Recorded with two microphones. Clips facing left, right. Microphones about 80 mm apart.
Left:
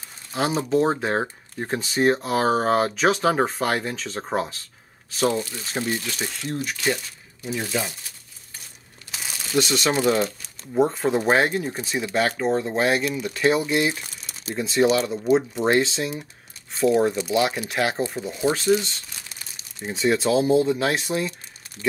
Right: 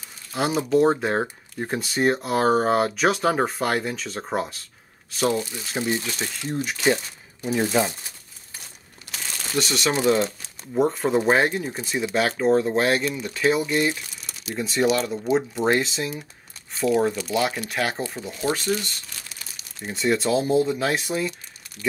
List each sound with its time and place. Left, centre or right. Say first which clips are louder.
0.3 s speech: right 1 dB; centre
5.9 s speech: right 3 dB; centre
6.1 s speech: even; centre
6.4 s speech: right 3 dB; centre
7.5 s speech: right 6 dB; right
9.1 s crumpling: left 3 dB; centre
10.2 s speech: even; centre
17.3 s speech: left 2 dB; centre
19.8 s speech: left 1 dB; centre